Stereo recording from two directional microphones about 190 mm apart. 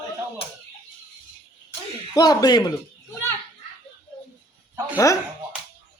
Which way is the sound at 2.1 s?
20° left (ahead or behind).